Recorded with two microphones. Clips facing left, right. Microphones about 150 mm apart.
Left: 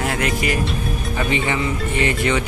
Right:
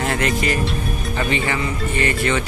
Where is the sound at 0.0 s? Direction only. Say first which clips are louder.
Right 1 dB; 5° left (ahead or behind).